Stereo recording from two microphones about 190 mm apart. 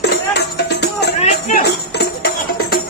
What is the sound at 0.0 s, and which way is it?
Music, 60° left (ahead or behind).